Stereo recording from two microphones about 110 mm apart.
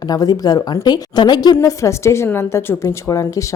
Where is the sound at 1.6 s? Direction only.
25° left (ahead or behind).